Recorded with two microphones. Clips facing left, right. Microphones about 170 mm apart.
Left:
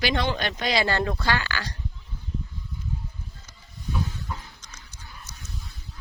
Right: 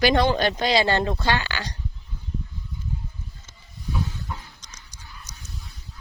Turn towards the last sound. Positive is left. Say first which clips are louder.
# even
turn(degrees=-15)  # may be behind; listen again after turning